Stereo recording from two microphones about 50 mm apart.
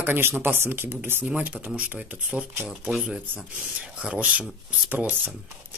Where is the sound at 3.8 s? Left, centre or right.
Right.